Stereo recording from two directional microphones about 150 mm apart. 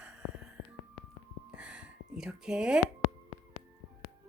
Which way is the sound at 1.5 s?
5° right (ahead or behind).